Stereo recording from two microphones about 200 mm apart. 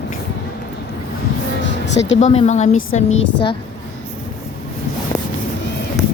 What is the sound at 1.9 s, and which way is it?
Speech, 65° left (ahead or behind).